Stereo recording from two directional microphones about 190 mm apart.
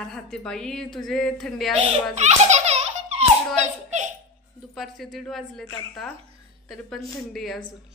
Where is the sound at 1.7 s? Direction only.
35° right (ahead or behind).